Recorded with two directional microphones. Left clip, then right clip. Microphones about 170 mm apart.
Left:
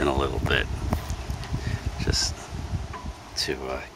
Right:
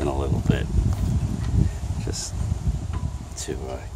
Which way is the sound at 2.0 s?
15° right (ahead or behind).